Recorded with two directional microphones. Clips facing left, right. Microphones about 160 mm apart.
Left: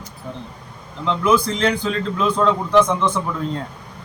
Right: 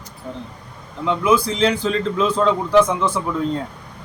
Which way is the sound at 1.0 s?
5° right (ahead or behind).